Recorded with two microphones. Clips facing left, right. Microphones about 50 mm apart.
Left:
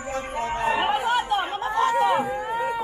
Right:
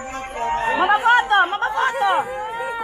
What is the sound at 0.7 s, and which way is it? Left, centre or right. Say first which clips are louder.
Chatter: right 10 dB; right.